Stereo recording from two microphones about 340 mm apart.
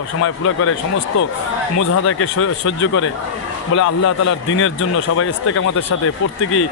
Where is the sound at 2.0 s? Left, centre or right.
Left.